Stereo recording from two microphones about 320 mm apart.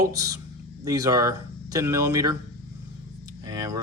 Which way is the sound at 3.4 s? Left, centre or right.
Centre.